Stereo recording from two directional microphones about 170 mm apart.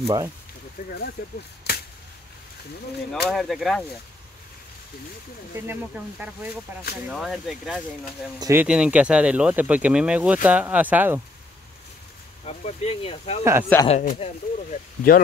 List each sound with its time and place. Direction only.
0.0 s speech: 25° right (ahead or behind)
0.8 s speech: 65° left (ahead or behind)
3.3 s speech: centre (ahead or behind)
5.7 s speech: 10° right (ahead or behind)
8.4 s speech: 15° right (ahead or behind)
8.6 s speech: 5° right (ahead or behind)
12.4 s speech: 35° left (ahead or behind)
13.4 s speech: 15° right (ahead or behind)
13.8 s speech: 40° left (ahead or behind)